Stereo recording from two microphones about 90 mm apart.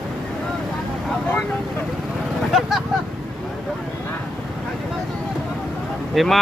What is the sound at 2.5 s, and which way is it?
Speech, 5° right (ahead or behind).